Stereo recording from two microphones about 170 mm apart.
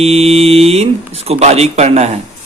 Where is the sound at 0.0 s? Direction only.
35° right (ahead or behind).